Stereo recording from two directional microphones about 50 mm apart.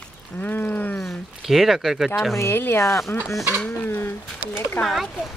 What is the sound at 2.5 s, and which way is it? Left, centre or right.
Speech, left.